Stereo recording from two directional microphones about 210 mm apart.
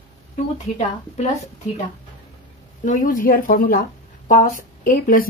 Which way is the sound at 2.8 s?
40° left (ahead or behind).